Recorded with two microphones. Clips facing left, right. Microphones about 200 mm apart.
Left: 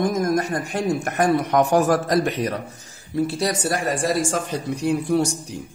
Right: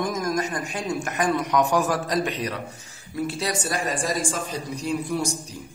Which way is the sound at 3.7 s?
65° left (ahead or behind).